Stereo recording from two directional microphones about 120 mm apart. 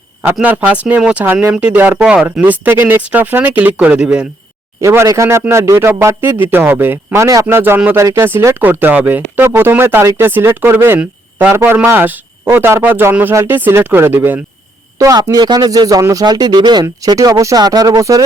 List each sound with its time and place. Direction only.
0.4 s speech: 10° right (ahead or behind)
4.8 s speech: 25° right (ahead or behind)
14.9 s a man's voice: 30° right (ahead or behind)